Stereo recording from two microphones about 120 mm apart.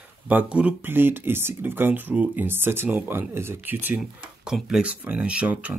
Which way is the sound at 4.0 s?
5° right (ahead or behind).